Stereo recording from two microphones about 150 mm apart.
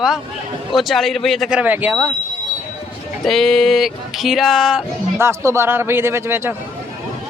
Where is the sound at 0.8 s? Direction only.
Centre (ahead or behind).